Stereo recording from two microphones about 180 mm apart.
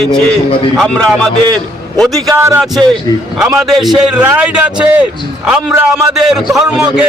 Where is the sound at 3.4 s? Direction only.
5° right (ahead or behind).